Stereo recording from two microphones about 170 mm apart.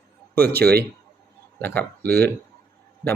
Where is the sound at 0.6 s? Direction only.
70° right (ahead or behind).